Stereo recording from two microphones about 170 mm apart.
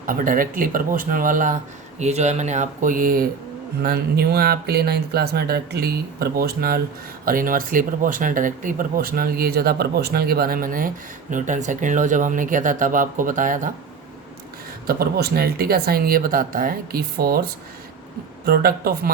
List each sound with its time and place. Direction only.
0.0 s speech: 55° right (ahead or behind)
2.0 s speech: 40° right (ahead or behind)
14.8 s speech: 65° right (ahead or behind)